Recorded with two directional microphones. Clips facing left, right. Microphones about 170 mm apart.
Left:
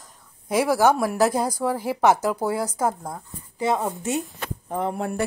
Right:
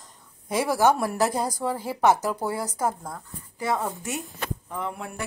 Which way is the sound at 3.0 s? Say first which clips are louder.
Left 3 dB; 25° left (ahead or behind).